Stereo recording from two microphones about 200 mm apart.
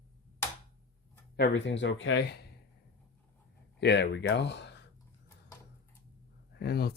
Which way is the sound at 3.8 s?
60° left (ahead or behind).